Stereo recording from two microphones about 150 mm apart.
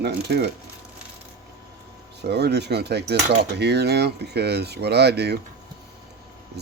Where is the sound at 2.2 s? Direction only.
90° right.